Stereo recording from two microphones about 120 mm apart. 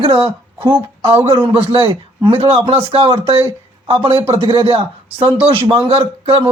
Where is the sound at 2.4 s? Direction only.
50° right (ahead or behind).